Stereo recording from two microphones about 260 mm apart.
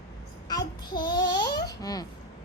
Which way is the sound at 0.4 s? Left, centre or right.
Centre.